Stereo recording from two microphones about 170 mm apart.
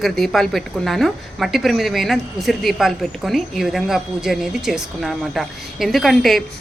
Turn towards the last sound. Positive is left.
turn(degrees=0)  # may be behind; listen again after turning